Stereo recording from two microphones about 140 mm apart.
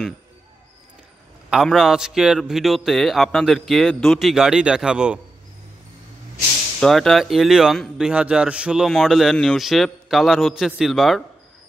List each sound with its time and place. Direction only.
1.5 s a man's voice: centre (ahead or behind)
6.8 s a man's voice: centre (ahead or behind)